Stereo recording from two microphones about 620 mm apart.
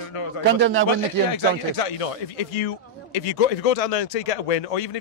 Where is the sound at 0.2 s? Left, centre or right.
Left.